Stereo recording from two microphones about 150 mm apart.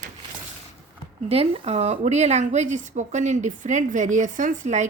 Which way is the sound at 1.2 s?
40° right (ahead or behind).